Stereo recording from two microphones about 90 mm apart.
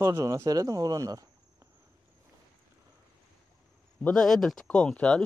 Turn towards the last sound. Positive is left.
turn(degrees=10)  # may be behind; listen again after turning